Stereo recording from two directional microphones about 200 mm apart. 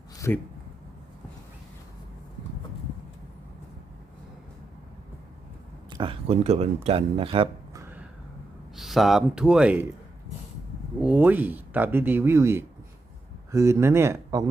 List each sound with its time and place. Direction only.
0.2 s a man's voice: 15° left (ahead or behind)
5.9 s speech: 25° right (ahead or behind)
8.7 s speech: centre (ahead or behind)
11.0 s speech: 5° right (ahead or behind)